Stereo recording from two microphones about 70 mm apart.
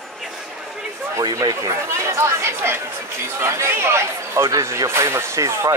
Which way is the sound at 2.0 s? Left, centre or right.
Right.